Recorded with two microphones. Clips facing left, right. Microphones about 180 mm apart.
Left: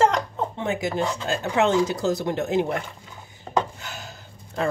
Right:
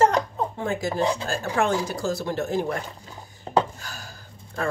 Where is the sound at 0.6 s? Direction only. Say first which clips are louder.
Right 1 dB; 20° left (ahead or behind).